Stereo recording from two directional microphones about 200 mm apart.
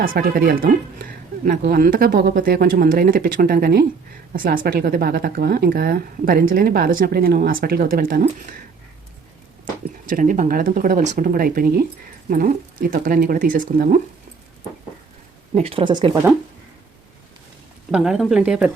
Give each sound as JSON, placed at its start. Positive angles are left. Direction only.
{"t": 0.0, "sound": "speech", "side_deg": -45}
{"t": 10.1, "sound": "speech", "side_deg": -40}
{"t": 15.5, "sound": "a woman's voice", "side_deg": -30}
{"t": 17.9, "sound": "speech", "side_deg": -5}